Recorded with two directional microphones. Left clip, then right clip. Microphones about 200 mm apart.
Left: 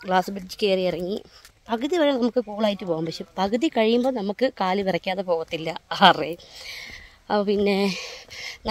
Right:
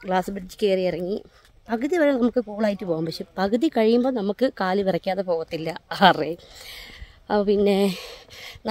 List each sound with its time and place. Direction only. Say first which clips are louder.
0.0 s speech: left 2 dB; 15° right (ahead or behind)